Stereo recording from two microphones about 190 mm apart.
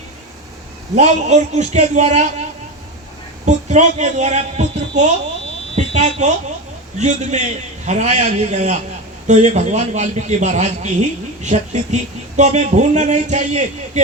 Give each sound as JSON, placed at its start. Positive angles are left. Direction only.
{"t": 0.9, "sound": "a man's voice", "side_deg": -40}
{"t": 3.4, "sound": "a man's voice", "side_deg": -40}